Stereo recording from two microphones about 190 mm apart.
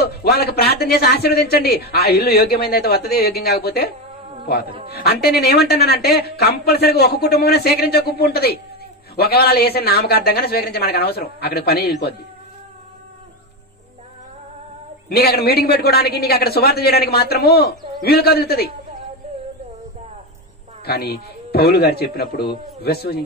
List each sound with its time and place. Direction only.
0.0 s speech: 55° left (ahead or behind)
4.9 s speech: 55° left (ahead or behind)
15.0 s speech: 55° left (ahead or behind)
20.8 s speech: 55° left (ahead or behind)